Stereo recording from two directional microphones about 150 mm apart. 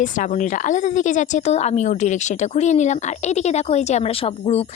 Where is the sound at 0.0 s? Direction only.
55° left (ahead or behind).